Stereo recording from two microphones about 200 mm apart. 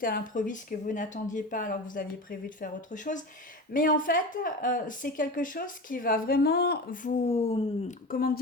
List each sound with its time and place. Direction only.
0.0 s speech: 45° left (ahead or behind)